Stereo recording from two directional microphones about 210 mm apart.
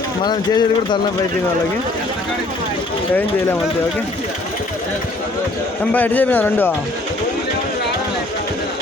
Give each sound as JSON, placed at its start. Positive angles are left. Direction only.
{"t": 0.3, "sound": "speech", "side_deg": 20}
{"t": 5.9, "sound": "speech", "side_deg": 5}